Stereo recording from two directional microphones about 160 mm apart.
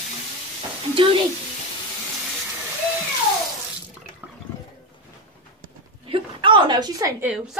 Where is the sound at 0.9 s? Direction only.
35° right (ahead or behind).